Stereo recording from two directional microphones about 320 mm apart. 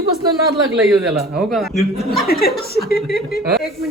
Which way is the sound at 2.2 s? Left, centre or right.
Left.